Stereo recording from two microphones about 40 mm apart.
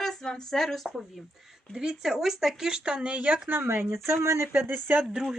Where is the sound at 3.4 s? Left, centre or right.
Right.